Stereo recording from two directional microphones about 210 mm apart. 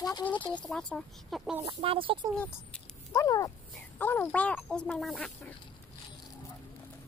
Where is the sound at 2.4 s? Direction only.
10° left (ahead or behind).